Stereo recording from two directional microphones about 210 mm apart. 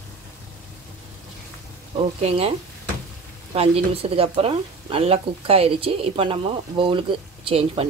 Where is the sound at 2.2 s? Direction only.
30° right (ahead or behind).